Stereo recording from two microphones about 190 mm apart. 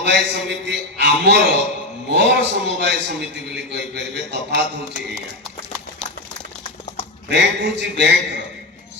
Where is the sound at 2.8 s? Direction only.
60° right (ahead or behind).